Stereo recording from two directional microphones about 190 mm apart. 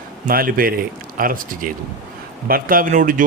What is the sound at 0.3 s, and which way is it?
Speech, 50° right (ahead or behind).